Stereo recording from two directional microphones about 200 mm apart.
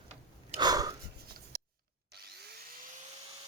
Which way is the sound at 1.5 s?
50° right (ahead or behind).